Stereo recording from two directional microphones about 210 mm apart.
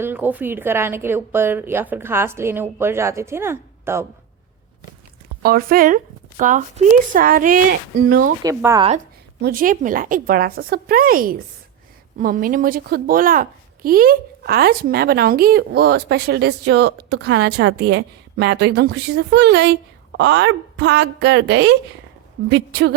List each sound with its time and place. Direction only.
0.0 s a woman's voice: 10° right (ahead or behind)
5.4 s speech: 45° right (ahead or behind)
8.4 s a woman's voice: 15° right (ahead or behind)
9.4 s a woman's voice: 45° right (ahead or behind)